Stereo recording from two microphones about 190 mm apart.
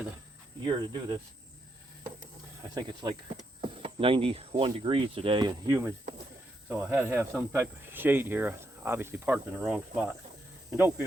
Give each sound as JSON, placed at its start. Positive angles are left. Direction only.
{"t": 0.6, "sound": "speech", "side_deg": -25}
{"t": 2.6, "sound": "speech", "side_deg": -20}